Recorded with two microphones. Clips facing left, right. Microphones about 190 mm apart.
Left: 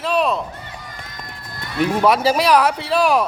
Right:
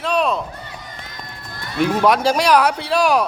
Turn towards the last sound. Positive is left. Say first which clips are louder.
# even
turn(degrees=0)  # may be behind; listen again after turning